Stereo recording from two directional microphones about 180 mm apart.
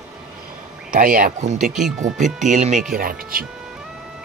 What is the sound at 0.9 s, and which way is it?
Speech, 50° right (ahead or behind).